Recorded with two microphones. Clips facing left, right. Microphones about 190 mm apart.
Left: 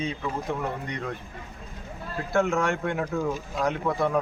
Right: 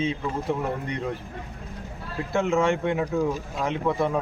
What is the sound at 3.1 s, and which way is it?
Speech, 15° right (ahead or behind).